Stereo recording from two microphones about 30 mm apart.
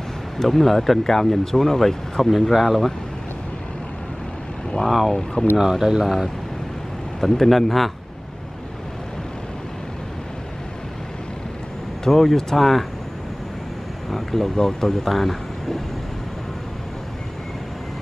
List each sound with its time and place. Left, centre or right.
0.4 s speech: centre
2.5 s speech: centre
4.8 s speech: centre
5.1 s speech: left
5.6 s speech: centre
7.2 s speech: centre
12.1 s speech: centre
14.1 s speech: centre
15.0 s speech: centre